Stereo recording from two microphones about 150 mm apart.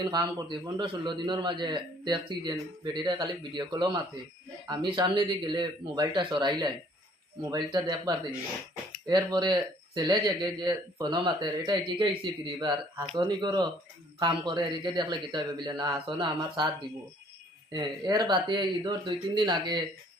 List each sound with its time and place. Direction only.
0.0 s a man's voice: 25° right (ahead or behind)
17.7 s a man's voice: 30° right (ahead or behind)